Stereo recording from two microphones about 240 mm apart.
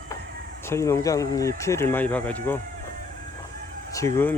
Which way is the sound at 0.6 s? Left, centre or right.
Centre.